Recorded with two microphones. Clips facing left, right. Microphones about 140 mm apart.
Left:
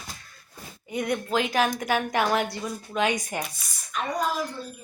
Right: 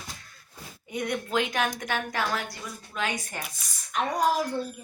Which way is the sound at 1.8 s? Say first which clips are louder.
Left 5 dB; 15° left (ahead or behind).